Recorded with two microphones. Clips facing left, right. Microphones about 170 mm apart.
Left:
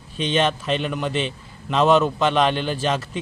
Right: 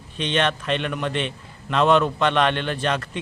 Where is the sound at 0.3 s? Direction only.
5° left (ahead or behind).